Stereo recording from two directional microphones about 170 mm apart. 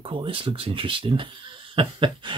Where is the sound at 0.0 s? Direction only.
30° right (ahead or behind).